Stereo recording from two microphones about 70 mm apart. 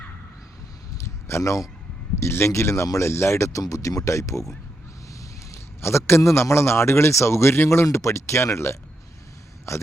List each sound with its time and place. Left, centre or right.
1.0 s a sound: left
2.2 s speech: left
3.6 s a man's voice: left